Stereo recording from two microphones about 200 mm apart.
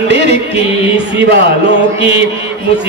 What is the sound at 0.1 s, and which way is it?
Music, 60° right (ahead or behind).